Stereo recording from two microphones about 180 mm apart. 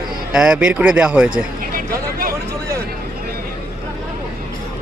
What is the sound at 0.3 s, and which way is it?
A man's voice, 5° right (ahead or behind).